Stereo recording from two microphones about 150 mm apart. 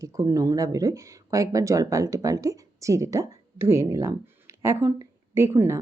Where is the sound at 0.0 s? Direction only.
20° right (ahead or behind).